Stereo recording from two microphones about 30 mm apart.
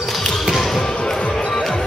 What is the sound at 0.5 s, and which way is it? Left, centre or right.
Basketball bounce, centre.